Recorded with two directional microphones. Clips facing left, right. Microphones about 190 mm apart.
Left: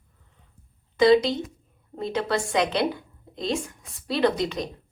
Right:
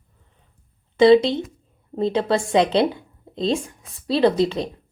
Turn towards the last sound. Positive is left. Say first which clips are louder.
# right 5 dB
turn(degrees=-25)  # may be behind; listen again after turning